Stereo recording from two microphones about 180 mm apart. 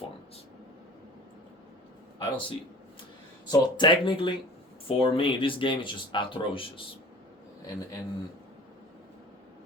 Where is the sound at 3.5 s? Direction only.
25° left (ahead or behind).